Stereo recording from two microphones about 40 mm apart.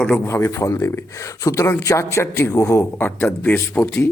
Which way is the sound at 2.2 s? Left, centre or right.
Left.